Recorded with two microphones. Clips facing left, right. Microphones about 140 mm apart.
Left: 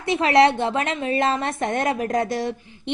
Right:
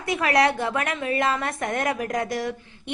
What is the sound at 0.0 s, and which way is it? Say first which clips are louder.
A woman's voice: left 4 dB; 25° left (ahead or behind).